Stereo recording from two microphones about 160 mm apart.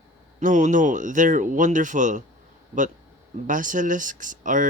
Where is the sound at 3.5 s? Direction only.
55° right (ahead or behind).